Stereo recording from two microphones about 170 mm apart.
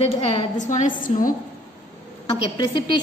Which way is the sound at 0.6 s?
45° left (ahead or behind).